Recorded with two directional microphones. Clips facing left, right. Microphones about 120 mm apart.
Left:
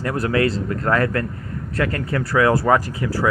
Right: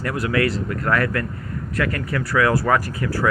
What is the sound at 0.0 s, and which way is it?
Speech, 30° left (ahead or behind).